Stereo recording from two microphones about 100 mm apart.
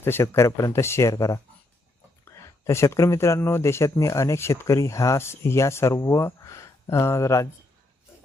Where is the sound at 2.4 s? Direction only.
30° left (ahead or behind).